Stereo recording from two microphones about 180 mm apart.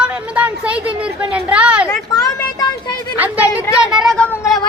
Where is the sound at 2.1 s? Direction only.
20° left (ahead or behind).